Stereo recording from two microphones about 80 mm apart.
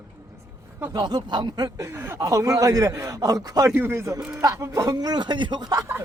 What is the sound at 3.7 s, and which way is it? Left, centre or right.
Speech, right.